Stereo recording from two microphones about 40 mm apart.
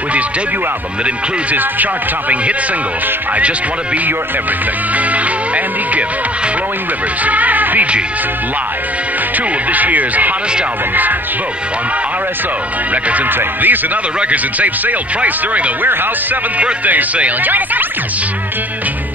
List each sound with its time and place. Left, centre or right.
1.5 s music: right
7.2 s speech: right
9.7 s music: right
12.9 s music: right
14.3 s speech: right
17.4 s music: right